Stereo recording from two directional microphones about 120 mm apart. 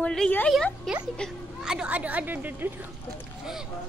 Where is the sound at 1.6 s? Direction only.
10° right (ahead or behind).